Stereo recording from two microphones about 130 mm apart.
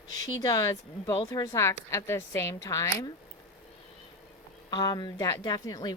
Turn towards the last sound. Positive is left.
turn(degrees=30)  # may be behind; listen again after turning